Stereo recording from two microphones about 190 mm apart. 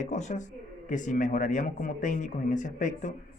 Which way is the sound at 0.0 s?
40° left (ahead or behind).